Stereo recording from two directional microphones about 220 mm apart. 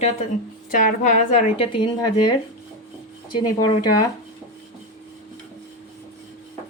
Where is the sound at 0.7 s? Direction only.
35° left (ahead or behind); by 2.3 s 20° left (ahead or behind).